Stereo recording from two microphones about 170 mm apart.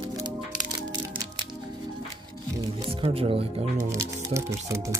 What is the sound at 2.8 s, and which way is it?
Speech, 30° right (ahead or behind).